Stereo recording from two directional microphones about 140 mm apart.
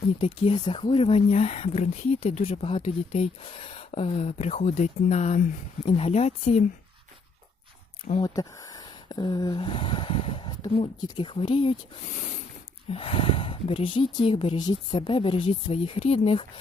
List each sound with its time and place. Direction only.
0.2 s speech: 40° left (ahead or behind)
8.2 s speech: 25° left (ahead or behind)
12.0 s a sound: 65° left (ahead or behind)
12.9 s speech: 40° left (ahead or behind)